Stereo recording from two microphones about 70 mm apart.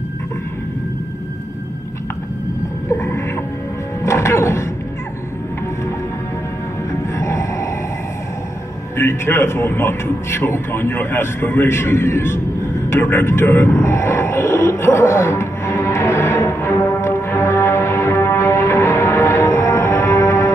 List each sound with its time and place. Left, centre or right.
2.9 s a sound: left
4.0 s music: left
6.9 s music: left
8.9 s a man's voice: left
12.9 s music: left